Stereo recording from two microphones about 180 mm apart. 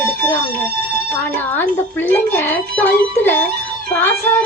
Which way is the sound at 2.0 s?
10° left (ahead or behind).